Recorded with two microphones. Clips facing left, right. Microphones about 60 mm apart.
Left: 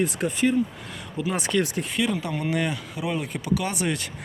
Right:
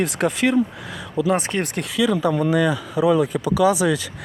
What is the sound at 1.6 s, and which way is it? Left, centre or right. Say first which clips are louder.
Speech: even; right.